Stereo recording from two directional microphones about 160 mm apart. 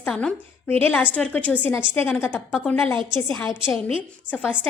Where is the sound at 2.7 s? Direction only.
10° left (ahead or behind).